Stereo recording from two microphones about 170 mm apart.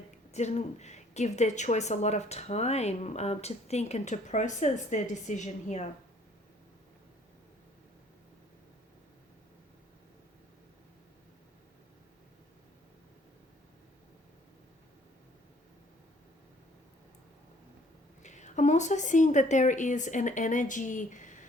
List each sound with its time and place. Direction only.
0.3 s a woman's voice: 40° left (ahead or behind)
18.2 s a woman's voice: 45° left (ahead or behind)